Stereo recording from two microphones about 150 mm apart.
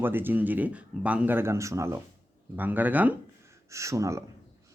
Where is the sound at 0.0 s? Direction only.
15° right (ahead or behind).